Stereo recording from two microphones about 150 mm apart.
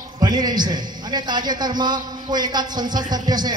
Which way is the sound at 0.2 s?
30° right (ahead or behind).